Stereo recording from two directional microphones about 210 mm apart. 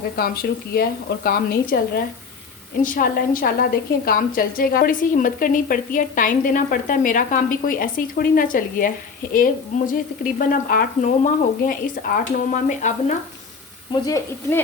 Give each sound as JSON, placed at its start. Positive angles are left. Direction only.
{"t": 0.7, "sound": "a woman's voice", "side_deg": 45}
{"t": 2.8, "sound": "a woman's voice", "side_deg": 40}
{"t": 13.9, "sound": "speech", "side_deg": 15}